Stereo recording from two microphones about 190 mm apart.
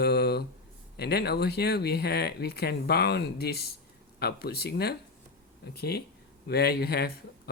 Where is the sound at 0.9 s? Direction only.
60° left (ahead or behind).